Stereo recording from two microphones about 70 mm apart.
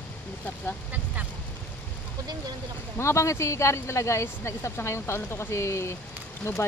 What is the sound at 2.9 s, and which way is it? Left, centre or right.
Speech, left.